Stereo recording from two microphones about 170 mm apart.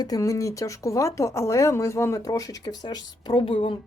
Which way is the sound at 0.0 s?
20° left (ahead or behind).